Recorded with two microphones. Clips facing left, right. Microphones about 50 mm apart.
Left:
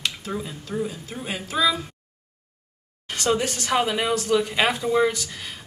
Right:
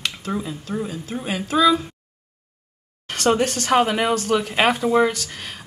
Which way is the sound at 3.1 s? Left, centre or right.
Right.